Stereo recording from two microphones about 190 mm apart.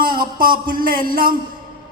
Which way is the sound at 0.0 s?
50° right (ahead or behind).